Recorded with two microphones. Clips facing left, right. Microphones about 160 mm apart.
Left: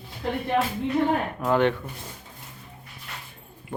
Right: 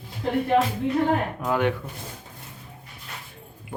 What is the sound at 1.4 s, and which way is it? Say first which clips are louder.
Speech: left 4 dB; 10° right (ahead or behind).